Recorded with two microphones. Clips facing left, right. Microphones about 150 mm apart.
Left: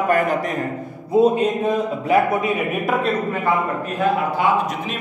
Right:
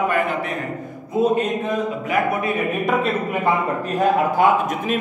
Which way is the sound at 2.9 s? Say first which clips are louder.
Left 1 dB; centre (ahead or behind).